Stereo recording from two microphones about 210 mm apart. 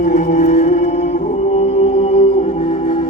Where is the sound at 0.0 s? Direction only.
35° left (ahead or behind).